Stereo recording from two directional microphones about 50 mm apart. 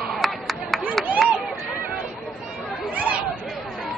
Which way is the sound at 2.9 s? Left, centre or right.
Right.